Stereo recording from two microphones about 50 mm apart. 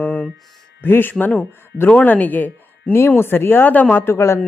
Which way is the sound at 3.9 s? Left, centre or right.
Left.